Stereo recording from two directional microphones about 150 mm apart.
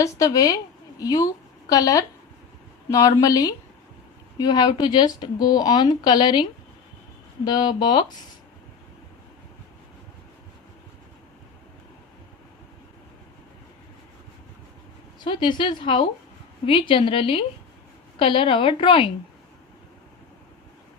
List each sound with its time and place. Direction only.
0.0 s a woman's voice: 25° left (ahead or behind)
15.2 s a woman's voice: 30° left (ahead or behind)